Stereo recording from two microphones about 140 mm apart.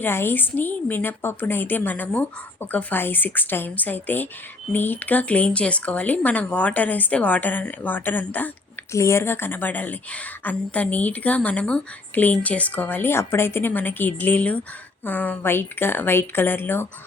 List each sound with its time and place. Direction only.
0.0 s speech: 15° left (ahead or behind)